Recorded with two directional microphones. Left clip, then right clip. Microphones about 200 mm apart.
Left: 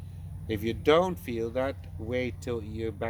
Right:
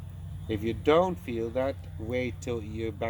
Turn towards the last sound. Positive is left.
turn(degrees=20)  # may be behind; listen again after turning